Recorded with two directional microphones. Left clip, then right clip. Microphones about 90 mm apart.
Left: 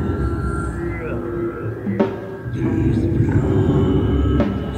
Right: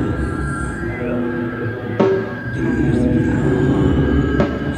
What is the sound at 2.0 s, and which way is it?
Music, 30° left (ahead or behind).